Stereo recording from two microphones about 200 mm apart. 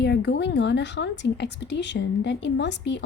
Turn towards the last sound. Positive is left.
turn(degrees=60)  # may be behind; listen again after turning